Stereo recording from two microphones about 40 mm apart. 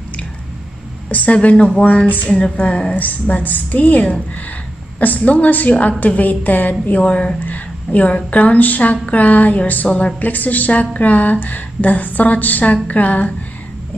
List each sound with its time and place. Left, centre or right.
1.0 s a woman's voice: left
3.0 s a woman's voice: left
6.9 s a woman's voice: left
7.4 s a woman's voice: left
9.8 s a woman's voice: left
10.2 s a woman's voice: left